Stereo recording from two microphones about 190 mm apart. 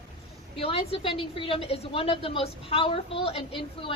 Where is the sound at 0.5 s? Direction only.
30° left (ahead or behind).